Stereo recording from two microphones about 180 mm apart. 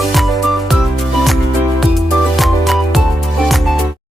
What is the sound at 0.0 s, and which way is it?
Music, centre (ahead or behind).